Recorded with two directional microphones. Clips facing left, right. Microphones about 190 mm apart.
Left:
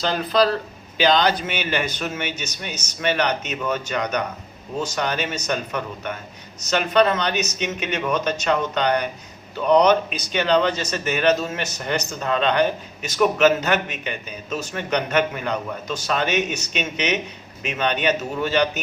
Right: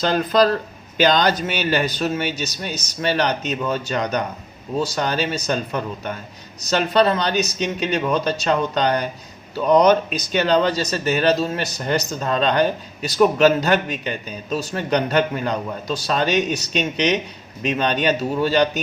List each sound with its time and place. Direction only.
0.0 s a man's voice: 45° right (ahead or behind)